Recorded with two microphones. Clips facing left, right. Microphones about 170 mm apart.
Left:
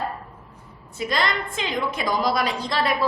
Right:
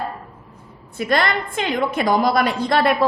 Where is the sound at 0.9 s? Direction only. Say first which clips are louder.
Right 5 dB; 60° right (ahead or behind).